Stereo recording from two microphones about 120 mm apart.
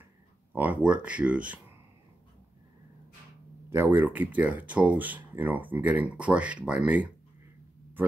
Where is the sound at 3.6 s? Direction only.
20° right (ahead or behind).